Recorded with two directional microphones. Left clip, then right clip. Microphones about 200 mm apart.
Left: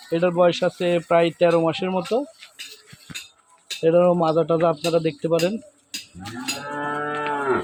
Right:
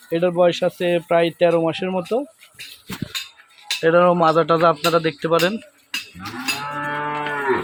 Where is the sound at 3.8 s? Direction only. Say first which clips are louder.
Right 3 dB; centre (ahead or behind).